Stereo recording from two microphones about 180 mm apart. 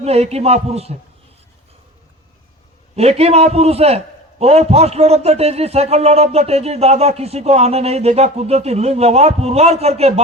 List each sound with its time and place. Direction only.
0.0 s a man's voice: 35° right (ahead or behind)
2.9 s a man's voice: 35° right (ahead or behind)